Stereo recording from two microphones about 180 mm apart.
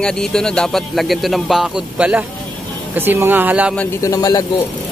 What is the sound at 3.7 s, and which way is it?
Speech, 20° left (ahead or behind).